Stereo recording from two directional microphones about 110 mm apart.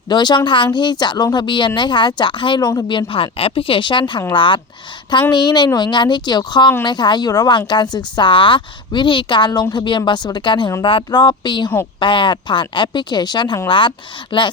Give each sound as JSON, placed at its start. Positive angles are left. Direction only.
{"t": 0.1, "sound": "a woman's voice", "side_deg": 40}
{"t": 3.1, "sound": "a woman's voice", "side_deg": 60}